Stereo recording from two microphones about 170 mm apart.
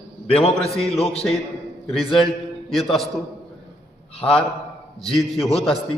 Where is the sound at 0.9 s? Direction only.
35° left (ahead or behind).